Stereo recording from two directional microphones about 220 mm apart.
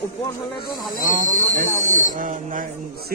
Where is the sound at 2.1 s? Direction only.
35° right (ahead or behind).